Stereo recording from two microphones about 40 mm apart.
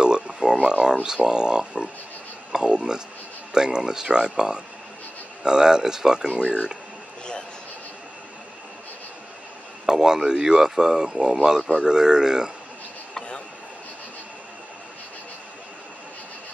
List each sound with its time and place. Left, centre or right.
0.0 s a sound: centre
1.0 s speech: centre
9.8 s speech: centre